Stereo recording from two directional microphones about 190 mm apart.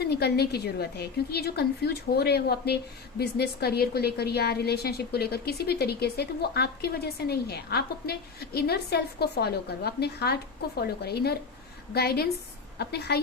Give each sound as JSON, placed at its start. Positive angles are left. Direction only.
{"t": 0.0, "sound": "a woman's voice", "side_deg": 60}